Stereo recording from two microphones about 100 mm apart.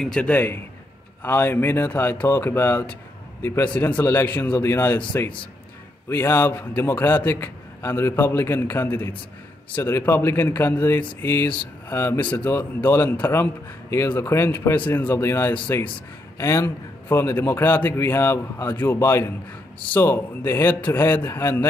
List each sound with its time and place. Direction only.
0.0 s a man's voice: 10° left (ahead or behind)
1.2 s a man's voice: 20° left (ahead or behind)